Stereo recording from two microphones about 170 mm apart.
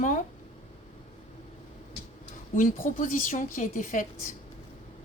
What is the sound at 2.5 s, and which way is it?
A woman's voice, 50° left (ahead or behind).